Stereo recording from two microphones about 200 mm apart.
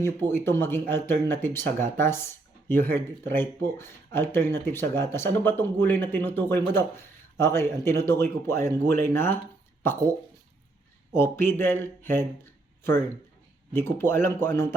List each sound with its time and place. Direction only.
0.0 s speech: 10° left (ahead or behind)
11.1 s speech: 10° left (ahead or behind)
13.7 s speech: 10° left (ahead or behind)